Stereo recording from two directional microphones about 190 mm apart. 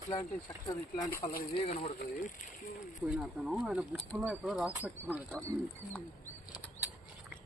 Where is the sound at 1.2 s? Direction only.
50° left (ahead or behind).